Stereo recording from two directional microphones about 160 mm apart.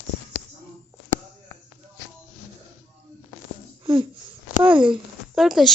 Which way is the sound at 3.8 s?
30° right (ahead or behind).